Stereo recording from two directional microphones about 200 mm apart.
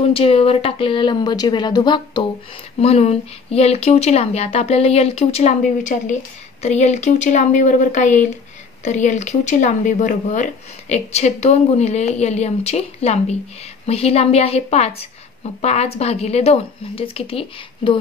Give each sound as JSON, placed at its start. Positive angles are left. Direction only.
{"t": 0.1, "sound": "speech", "side_deg": 30}